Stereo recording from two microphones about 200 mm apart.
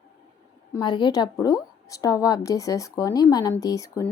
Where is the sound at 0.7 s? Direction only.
20° left (ahead or behind).